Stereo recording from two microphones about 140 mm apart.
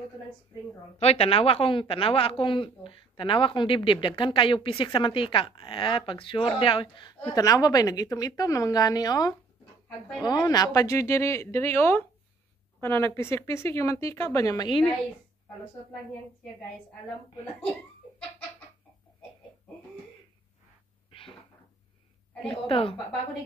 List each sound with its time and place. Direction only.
0.9 s a woman's voice: 45° left (ahead or behind)
7.3 s speech: 25° left (ahead or behind)
9.8 s speech: centre (ahead or behind)
10.2 s speech: 30° left (ahead or behind)
21.1 s a sound: 40° left (ahead or behind)
22.5 s a woman's voice: 40° left (ahead or behind)